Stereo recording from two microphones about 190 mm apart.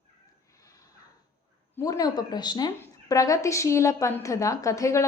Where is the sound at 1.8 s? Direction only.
20° left (ahead or behind).